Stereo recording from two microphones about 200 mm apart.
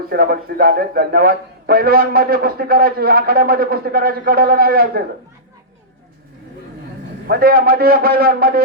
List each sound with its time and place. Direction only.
0.1 s a man's voice: 50° right (ahead or behind)
7.3 s a man's voice: 50° right (ahead or behind)